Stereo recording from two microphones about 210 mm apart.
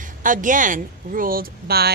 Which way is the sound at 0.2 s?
40° right (ahead or behind).